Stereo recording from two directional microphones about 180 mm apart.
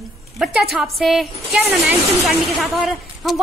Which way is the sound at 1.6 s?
10° right (ahead or behind).